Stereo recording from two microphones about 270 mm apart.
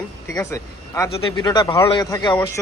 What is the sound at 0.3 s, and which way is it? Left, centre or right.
Speech, centre.